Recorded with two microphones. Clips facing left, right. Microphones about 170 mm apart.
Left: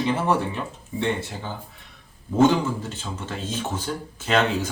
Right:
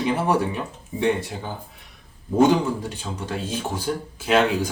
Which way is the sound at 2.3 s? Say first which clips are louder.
Right 1 dB; 15° right (ahead or behind).